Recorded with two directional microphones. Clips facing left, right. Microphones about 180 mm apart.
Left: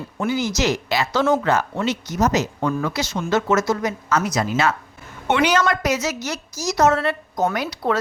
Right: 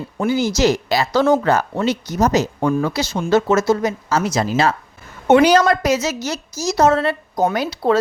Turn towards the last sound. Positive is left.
turn(degrees=-30)  # may be behind; listen again after turning